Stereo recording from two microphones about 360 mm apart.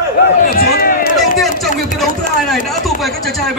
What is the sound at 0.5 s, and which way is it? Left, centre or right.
Run, left.